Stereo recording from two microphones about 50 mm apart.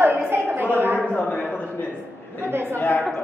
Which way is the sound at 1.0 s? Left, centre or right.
Left.